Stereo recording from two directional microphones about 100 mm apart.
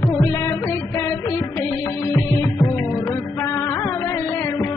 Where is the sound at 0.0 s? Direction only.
30° left (ahead or behind).